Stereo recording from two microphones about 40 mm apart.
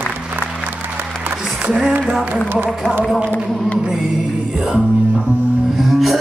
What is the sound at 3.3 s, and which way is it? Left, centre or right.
Speech, left.